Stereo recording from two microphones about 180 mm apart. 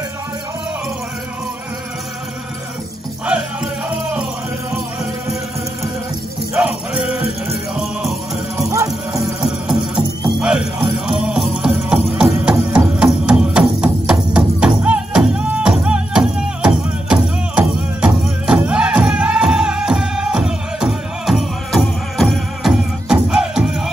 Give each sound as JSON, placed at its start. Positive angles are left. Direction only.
{"t": 6.5, "sound": "music", "side_deg": -5}
{"t": 8.5, "sound": "music", "side_deg": -20}
{"t": 10.4, "sound": "music", "side_deg": -5}